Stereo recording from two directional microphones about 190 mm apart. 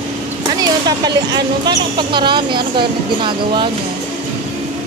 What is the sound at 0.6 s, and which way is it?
Speech, 20° right (ahead or behind).